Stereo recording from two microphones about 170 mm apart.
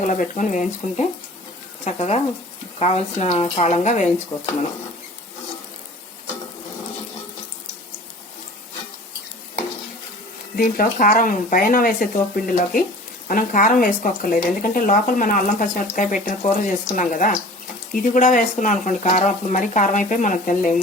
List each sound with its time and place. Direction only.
0.1 s speech: 45° left (ahead or behind)
4.3 s speech: 30° left (ahead or behind)
10.6 s speech: 55° left (ahead or behind)